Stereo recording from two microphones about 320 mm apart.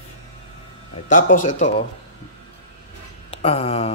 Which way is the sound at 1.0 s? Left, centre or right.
Left.